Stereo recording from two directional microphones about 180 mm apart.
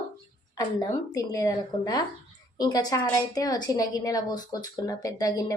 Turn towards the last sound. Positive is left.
turn(degrees=20)  # may be behind; listen again after turning